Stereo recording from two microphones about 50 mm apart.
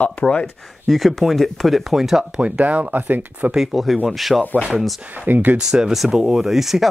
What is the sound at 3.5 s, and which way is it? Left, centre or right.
Speech, centre.